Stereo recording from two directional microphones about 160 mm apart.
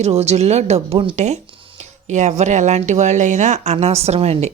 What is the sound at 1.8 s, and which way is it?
Speech, 45° right (ahead or behind).